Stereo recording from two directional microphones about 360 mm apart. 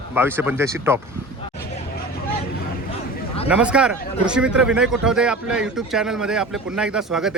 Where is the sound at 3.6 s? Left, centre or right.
Centre.